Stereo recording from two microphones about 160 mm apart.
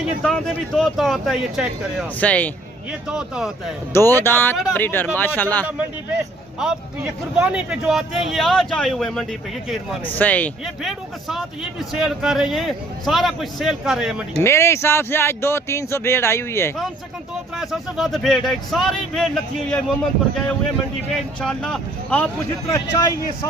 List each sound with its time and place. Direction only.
0.2 s a man's voice: 5° left (ahead or behind)
2.2 s speech: 10° left (ahead or behind)
3.1 s a man's voice: 5° right (ahead or behind)
3.9 s speech: 15° left (ahead or behind)
4.5 s a man's voice: centre (ahead or behind)
4.8 s speech: 10° left (ahead or behind)
5.6 s a man's voice: 10° right (ahead or behind); by 10.5 s 10° left (ahead or behind)
10.8 s a man's voice: centre (ahead or behind)
14.4 s speech: 15° left (ahead or behind)
17.6 s a man's voice: centre (ahead or behind)
21.1 s speech: 5° left (ahead or behind)
22.7 s speech: 20° left (ahead or behind)